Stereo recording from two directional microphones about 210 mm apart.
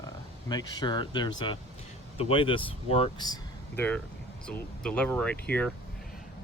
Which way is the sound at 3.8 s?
5° left (ahead or behind).